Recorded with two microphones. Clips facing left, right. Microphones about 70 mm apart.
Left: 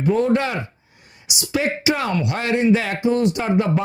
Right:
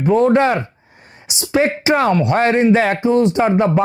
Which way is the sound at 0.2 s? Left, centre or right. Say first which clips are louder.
Right 6 dB; right.